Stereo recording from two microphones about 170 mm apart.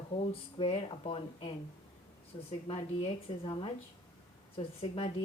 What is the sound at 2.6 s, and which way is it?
A woman's voice, 30° left (ahead or behind).